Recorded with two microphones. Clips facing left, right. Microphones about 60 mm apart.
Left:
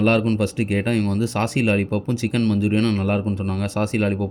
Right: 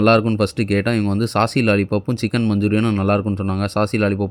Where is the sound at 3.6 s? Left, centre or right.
Right.